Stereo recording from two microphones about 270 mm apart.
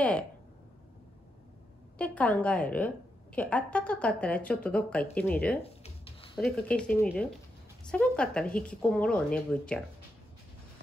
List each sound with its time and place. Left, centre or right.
2.0 s speech: centre
5.6 s a sound: left
6.3 s speech: centre